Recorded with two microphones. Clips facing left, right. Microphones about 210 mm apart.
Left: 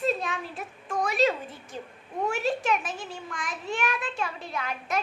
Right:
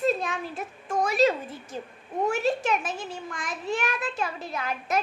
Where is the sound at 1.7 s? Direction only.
40° right (ahead or behind).